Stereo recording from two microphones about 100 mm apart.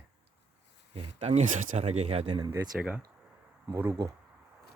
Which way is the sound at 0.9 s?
90° right.